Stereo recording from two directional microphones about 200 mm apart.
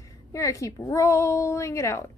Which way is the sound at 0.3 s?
15° left (ahead or behind).